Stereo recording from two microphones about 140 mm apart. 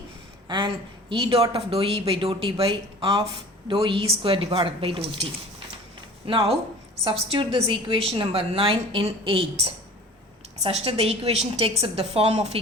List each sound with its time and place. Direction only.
0.4 s a woman's voice: 30° right (ahead or behind); by 12.5 s 50° right (ahead or behind)